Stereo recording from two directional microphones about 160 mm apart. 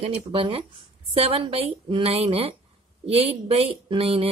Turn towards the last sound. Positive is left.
turn(degrees=-35)  # may be behind; listen again after turning